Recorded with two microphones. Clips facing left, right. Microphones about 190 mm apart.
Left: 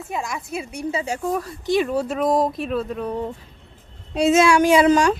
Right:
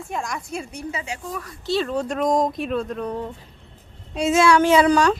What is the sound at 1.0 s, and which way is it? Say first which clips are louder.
Speech: left 8 dB; 40° left (ahead or behind).